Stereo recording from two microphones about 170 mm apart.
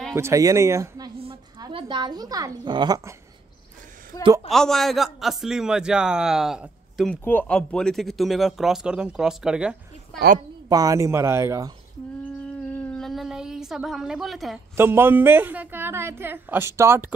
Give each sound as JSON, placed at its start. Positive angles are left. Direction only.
{"t": 0.1, "sound": "a woman's voice", "side_deg": -15}
{"t": 1.6, "sound": "a woman's voice", "side_deg": -30}
{"t": 4.1, "sound": "a man's voice", "side_deg": 20}
{"t": 4.5, "sound": "a man's voice", "side_deg": 0}
{"t": 7.2, "sound": "a man's voice", "side_deg": 10}
{"t": 10.7, "sound": "a woman's voice", "side_deg": -20}
{"t": 12.2, "sound": "a sound", "side_deg": 5}
{"t": 14.8, "sound": "a woman's voice", "side_deg": -15}